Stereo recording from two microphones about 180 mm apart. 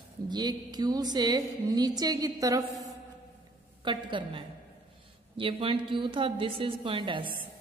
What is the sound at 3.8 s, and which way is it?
Speech, 30° right (ahead or behind).